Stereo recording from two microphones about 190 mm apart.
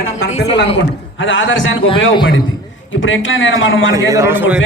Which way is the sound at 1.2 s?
80° left.